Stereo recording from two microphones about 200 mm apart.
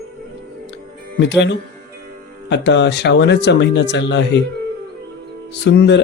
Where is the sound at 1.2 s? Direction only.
60° left (ahead or behind).